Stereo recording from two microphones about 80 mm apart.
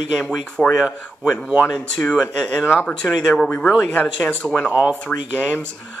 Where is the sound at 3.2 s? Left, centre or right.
Centre.